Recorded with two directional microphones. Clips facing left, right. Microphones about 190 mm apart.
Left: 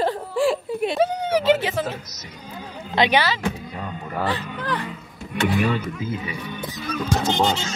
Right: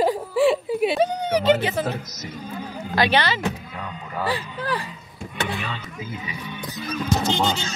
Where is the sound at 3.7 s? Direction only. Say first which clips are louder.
Left 2 dB; 45° left (ahead or behind).